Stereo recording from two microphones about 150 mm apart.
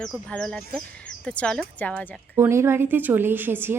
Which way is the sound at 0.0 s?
5° left (ahead or behind).